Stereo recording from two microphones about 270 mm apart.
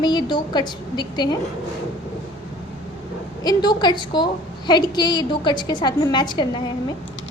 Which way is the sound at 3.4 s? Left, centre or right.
Centre.